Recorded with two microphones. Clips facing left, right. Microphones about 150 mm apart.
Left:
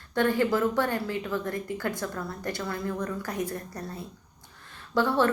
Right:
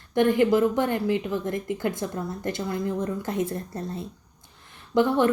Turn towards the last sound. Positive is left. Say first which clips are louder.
# right 3 dB
turn(degrees=-20)  # may be behind; listen again after turning